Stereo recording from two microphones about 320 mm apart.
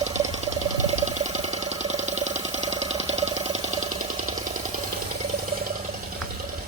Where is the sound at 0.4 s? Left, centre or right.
Right.